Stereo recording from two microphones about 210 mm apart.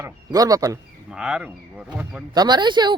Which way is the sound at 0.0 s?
15° right (ahead or behind).